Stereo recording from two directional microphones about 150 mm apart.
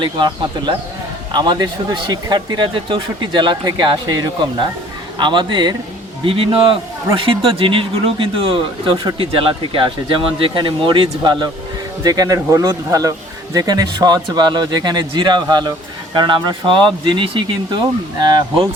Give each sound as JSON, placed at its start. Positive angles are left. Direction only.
{"t": 0.0, "sound": "speech", "side_deg": -30}